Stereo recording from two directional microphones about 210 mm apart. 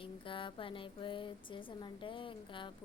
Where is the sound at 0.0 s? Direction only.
25° left (ahead or behind).